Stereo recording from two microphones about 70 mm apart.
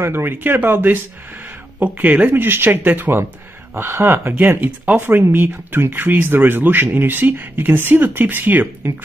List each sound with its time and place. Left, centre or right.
0.0 s speech: right